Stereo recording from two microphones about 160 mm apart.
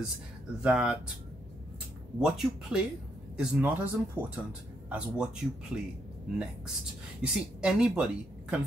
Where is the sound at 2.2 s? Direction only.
5° right (ahead or behind).